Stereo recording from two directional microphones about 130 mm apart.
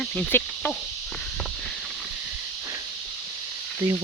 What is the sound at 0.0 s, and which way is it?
Cricket, 10° left (ahead or behind).